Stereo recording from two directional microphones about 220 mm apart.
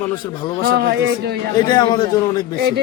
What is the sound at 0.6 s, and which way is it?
Speech, 50° right (ahead or behind).